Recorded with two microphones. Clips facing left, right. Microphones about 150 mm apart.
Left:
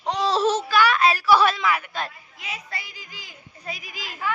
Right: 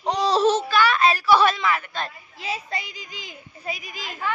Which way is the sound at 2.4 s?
30° right (ahead or behind).